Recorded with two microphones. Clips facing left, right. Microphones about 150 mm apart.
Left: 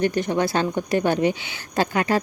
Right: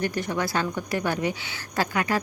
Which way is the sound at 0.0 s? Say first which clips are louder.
Left 6 dB; 25° left (ahead or behind).